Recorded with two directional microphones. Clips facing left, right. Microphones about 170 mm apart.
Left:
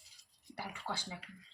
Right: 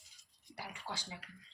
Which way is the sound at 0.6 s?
55° left (ahead or behind).